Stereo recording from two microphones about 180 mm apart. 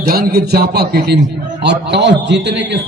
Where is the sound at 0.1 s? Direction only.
55° right (ahead or behind).